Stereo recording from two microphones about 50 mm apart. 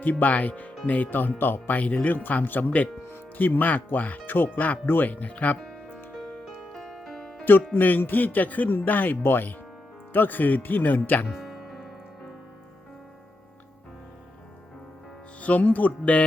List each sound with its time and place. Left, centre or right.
0.0 s speech: left
6.4 s music: centre
7.7 s speech: left
11.3 s music: centre
15.4 s speech: left